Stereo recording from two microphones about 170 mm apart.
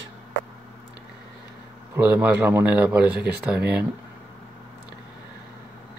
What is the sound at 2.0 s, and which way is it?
Speech, 10° right (ahead or behind).